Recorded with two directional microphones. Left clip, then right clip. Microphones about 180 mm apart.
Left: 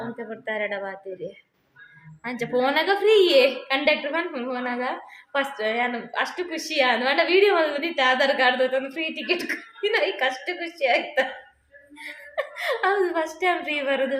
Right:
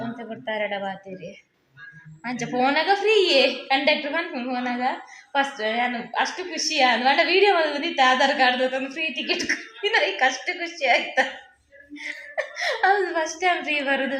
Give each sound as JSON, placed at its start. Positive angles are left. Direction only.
{"t": 0.2, "sound": "speech", "side_deg": 25}
{"t": 2.2, "sound": "a woman's voice", "side_deg": 20}